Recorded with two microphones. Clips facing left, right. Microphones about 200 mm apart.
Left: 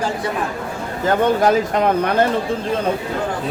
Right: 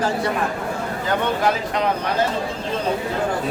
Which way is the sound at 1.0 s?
45° left (ahead or behind).